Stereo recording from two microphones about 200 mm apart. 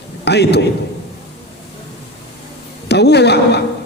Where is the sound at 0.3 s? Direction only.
55° left (ahead or behind).